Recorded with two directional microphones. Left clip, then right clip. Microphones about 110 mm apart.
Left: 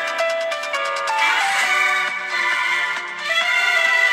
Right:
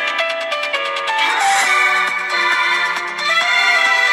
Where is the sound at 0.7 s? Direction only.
10° right (ahead or behind).